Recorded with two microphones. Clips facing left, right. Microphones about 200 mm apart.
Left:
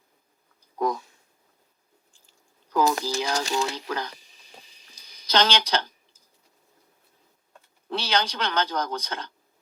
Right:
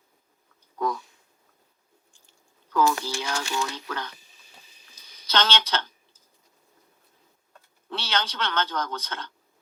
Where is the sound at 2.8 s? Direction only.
35° left (ahead or behind).